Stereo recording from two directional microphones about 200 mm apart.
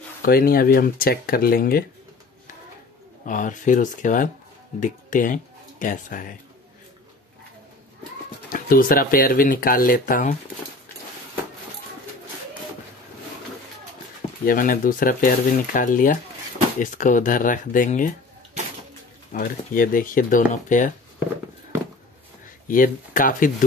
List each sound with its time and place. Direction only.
0.2 s speech: 45° left (ahead or behind)
3.3 s speech: 40° left (ahead or behind)
8.5 s speech: 45° left (ahead or behind)
14.4 s speech: 45° left (ahead or behind)
19.3 s speech: 45° left (ahead or behind)
22.7 s speech: 45° left (ahead or behind)